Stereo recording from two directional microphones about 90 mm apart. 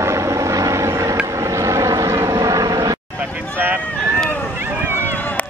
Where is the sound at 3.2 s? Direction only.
20° right (ahead or behind).